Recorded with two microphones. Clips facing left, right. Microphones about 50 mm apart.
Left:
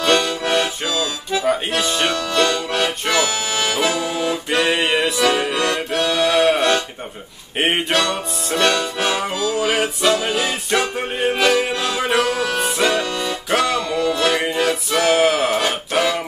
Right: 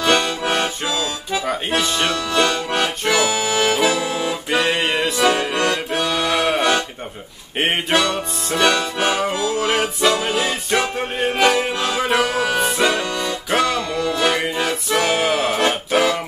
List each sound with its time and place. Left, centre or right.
0.0 s accordion: centre
1.3 s music: centre
4.0 s accordion: centre
4.3 s music: centre